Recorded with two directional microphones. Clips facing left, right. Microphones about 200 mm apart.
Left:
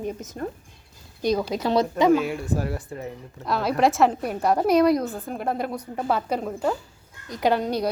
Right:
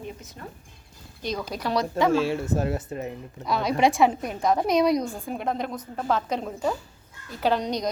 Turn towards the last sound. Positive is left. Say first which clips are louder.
# left 2 dB
turn(degrees=5)  # may be behind; listen again after turning